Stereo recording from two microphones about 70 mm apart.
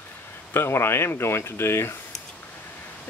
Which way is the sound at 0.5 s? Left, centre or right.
Left.